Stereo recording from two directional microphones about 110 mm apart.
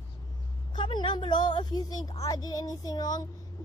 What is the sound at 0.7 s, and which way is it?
A woman's voice, 45° left (ahead or behind).